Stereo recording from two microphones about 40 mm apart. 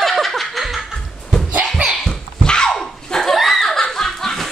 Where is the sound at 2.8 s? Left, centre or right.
Centre.